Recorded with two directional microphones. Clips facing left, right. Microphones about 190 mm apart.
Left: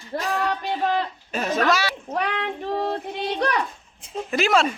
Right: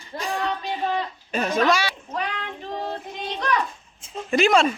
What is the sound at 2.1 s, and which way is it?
Child singing, 65° left (ahead or behind).